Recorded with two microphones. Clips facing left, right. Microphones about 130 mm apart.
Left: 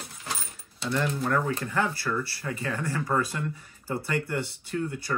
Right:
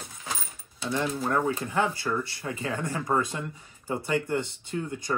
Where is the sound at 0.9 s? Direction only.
15° right (ahead or behind).